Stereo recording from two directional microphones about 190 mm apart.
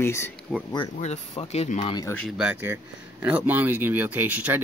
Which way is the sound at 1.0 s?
35° left (ahead or behind).